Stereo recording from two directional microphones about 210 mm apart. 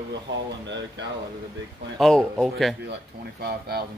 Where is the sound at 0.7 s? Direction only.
60° right (ahead or behind).